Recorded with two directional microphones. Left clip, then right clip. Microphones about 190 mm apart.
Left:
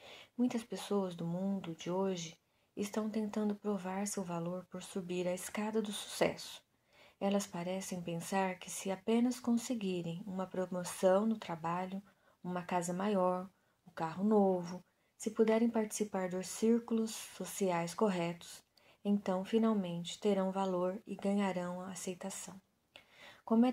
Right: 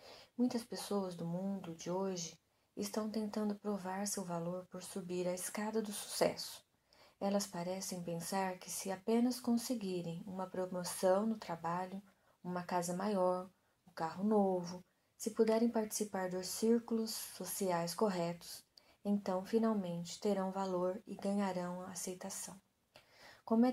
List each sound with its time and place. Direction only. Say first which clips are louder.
0.4 s a woman's voice: left 1 dB; 15° left (ahead or behind)
7.2 s a woman's voice: left 2 dB; 20° left (ahead or behind)
23.4 s speech: left 2 dB; 20° left (ahead or behind)